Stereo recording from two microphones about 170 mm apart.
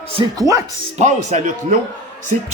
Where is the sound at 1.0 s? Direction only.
45° right (ahead or behind).